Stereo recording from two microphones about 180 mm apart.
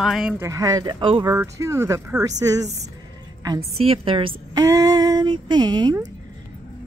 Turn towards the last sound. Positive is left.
turn(degrees=-25)  # may be behind; listen again after turning